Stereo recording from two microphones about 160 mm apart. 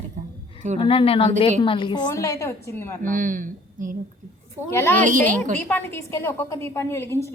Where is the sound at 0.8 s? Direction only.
35° left (ahead or behind).